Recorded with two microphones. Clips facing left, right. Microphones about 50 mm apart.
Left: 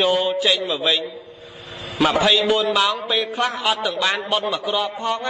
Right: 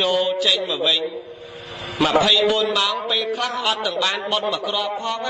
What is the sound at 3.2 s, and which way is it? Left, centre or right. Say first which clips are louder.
Speech: left 1 dB; left.